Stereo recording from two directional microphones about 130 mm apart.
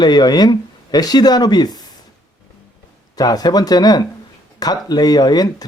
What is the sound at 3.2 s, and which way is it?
Speech, 30° left (ahead or behind).